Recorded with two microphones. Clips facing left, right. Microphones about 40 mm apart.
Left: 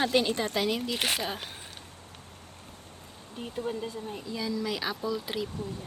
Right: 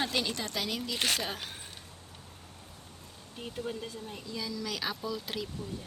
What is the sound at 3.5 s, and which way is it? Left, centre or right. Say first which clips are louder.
Speech: left 5 dB; centre.